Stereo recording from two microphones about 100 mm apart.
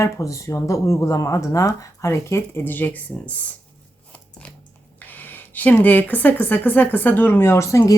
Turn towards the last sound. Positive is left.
turn(degrees=30)  # may be behind; listen again after turning